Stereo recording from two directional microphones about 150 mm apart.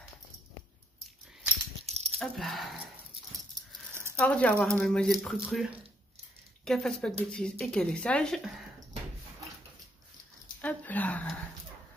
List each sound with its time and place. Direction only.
1.9 s dog: 45° right (ahead or behind)
2.1 s speech: centre (ahead or behind)
4.2 s speech: 5° left (ahead or behind)
10.6 s a sound: 10° left (ahead or behind)